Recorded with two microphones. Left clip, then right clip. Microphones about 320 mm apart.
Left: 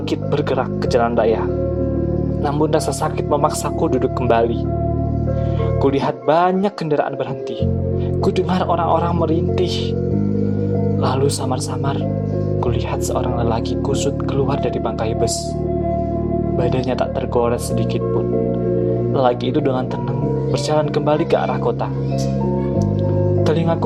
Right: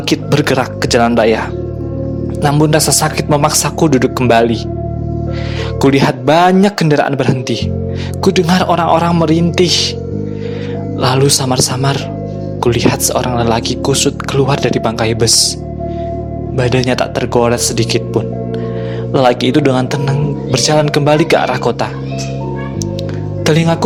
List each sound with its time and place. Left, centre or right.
0.1 s speech: right
2.4 s speech: right
5.8 s speech: right
11.0 s speech: right
16.6 s speech: right
23.4 s music: right